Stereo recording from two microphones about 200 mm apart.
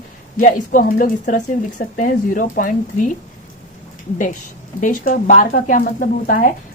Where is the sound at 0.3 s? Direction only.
40° left (ahead or behind).